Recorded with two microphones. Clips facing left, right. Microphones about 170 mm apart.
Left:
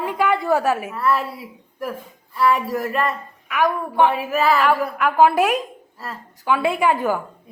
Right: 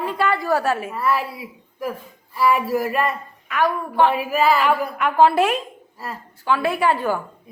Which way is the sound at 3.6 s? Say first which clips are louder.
Left 1 dB; 15° left (ahead or behind).